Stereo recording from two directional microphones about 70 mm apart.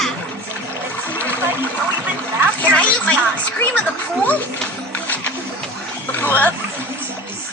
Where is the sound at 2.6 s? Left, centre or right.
Left.